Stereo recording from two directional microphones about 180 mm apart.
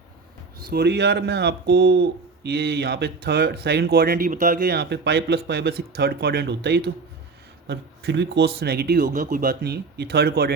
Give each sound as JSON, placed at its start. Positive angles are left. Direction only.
{"t": 0.7, "sound": "speech", "side_deg": -65}